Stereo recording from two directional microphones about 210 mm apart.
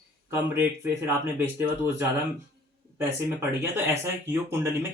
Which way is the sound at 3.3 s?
10° right (ahead or behind).